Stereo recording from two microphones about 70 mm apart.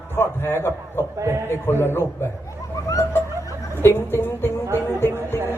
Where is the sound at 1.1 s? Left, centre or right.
Right.